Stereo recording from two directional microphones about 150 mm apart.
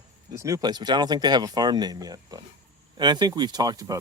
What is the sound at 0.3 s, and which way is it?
Speech, 20° right (ahead or behind).